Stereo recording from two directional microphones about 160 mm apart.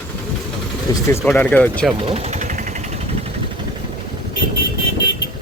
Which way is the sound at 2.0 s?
35° right (ahead or behind).